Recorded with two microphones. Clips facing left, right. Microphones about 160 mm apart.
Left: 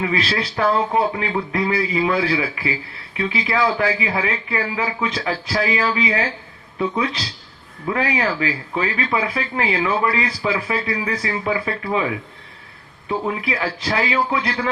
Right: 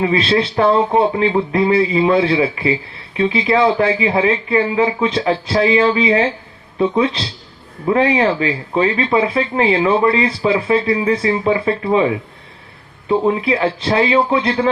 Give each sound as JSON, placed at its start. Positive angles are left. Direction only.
{"t": 0.0, "sound": "a man's voice", "side_deg": -25}